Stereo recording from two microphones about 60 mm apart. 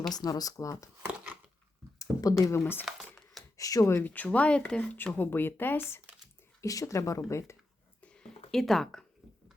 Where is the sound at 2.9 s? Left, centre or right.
Centre.